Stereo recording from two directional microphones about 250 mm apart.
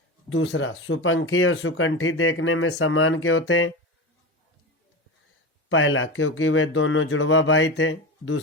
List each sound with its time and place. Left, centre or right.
0.3 s speech: left
5.6 s speech: left